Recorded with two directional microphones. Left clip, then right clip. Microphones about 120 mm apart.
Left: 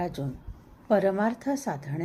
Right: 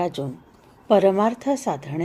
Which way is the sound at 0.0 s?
30° right (ahead or behind).